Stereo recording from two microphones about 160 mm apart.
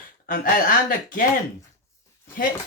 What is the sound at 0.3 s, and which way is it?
Speech, 60° left (ahead or behind).